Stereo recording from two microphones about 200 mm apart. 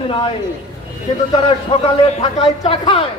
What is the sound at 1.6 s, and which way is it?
A man's voice, 25° left (ahead or behind).